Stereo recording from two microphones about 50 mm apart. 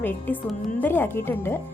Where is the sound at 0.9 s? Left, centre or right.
Left.